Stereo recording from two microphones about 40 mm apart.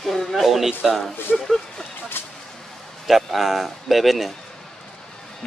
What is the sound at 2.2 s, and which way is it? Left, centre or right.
Speech, left.